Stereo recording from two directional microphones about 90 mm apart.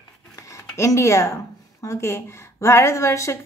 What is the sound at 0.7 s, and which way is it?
Speech, 35° left (ahead or behind).